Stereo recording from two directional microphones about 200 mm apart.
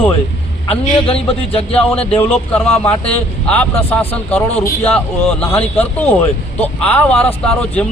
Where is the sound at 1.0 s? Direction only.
30° left (ahead or behind).